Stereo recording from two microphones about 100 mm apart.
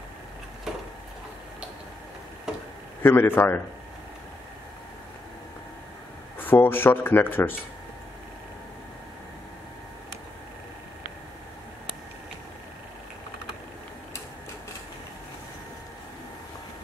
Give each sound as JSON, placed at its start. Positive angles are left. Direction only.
{"t": 0.7, "sound": "a sound", "side_deg": -5}
{"t": 3.0, "sound": "speech", "side_deg": 20}
{"t": 6.3, "sound": "speech", "side_deg": 20}